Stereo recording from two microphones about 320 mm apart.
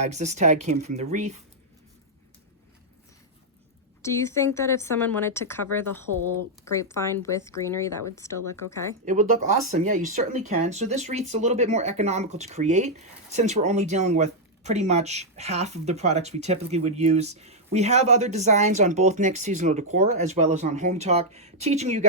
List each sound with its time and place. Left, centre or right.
0.0 s speech: right
4.0 s speech: centre
6.7 s speech: centre
9.0 s speech: right